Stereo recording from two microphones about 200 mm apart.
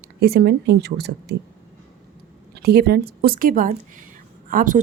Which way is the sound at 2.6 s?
55° right (ahead or behind).